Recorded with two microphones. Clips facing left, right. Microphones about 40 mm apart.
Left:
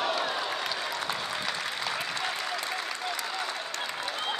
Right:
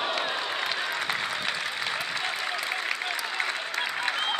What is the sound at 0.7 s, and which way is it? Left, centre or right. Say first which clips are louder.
Applause: right 3 dB; right.